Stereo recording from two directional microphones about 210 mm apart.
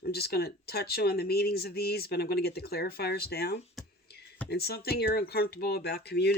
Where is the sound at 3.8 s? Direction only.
Centre (ahead or behind).